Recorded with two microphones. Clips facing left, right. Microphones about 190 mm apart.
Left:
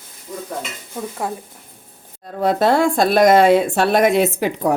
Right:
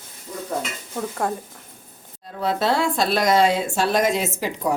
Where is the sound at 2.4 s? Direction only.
50° left (ahead or behind).